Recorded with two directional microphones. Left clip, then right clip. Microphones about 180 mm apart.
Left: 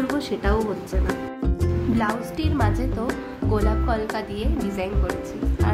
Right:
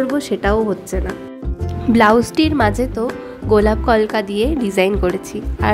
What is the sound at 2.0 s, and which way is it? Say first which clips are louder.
A woman's voice: right 17 dB; 40° right (ahead or behind).